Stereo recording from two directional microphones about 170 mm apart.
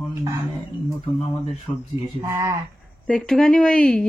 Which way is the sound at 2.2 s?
20° right (ahead or behind).